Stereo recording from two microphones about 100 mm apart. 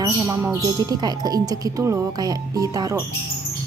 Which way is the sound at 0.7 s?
40° right (ahead or behind).